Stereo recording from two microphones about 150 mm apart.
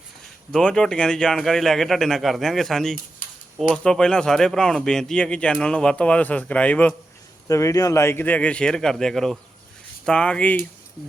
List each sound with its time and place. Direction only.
0.5 s speech: 5° left (ahead or behind)
3.2 s a sound: 65° left (ahead or behind)
3.6 s speech: 5° left (ahead or behind)
7.4 s speech: 20° left (ahead or behind)